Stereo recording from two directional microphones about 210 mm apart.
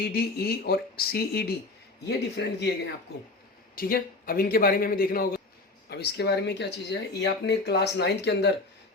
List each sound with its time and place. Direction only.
0.0 s speech: 50° left (ahead or behind)